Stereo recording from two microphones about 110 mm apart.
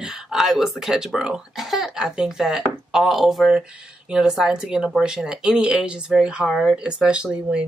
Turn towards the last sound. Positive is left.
turn(degrees=-10)  # may be behind; listen again after turning